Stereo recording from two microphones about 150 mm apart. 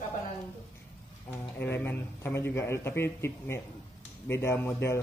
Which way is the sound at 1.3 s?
15° left (ahead or behind).